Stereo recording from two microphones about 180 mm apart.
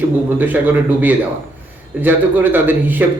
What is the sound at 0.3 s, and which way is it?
Speech, 10° right (ahead or behind).